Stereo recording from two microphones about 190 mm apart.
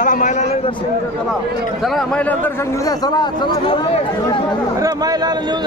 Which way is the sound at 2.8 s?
20° left (ahead or behind).